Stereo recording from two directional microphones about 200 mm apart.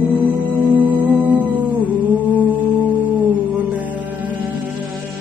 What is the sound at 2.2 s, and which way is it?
Music, 10° left (ahead or behind).